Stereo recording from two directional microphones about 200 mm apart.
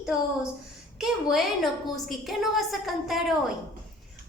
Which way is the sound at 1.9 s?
Centre (ahead or behind).